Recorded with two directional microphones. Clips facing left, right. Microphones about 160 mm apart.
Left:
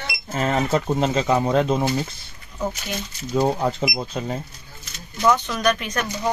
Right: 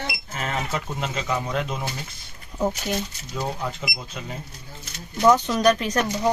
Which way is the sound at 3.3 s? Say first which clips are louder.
Left 9 dB; 40° left (ahead or behind).